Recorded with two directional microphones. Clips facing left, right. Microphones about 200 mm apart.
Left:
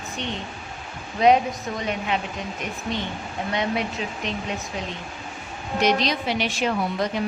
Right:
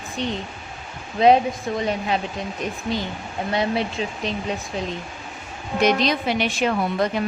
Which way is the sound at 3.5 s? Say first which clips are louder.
Right 3 dB; 30° right (ahead or behind).